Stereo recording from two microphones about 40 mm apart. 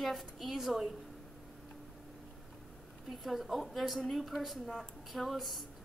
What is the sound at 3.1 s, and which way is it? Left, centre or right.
A woman's voice, centre.